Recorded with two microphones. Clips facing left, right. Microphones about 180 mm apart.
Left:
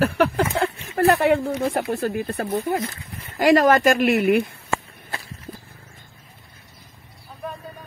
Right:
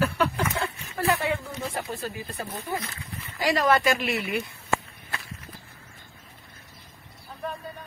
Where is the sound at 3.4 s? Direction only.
50° left (ahead or behind).